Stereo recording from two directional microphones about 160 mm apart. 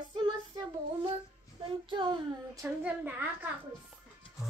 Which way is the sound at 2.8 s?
10° right (ahead or behind).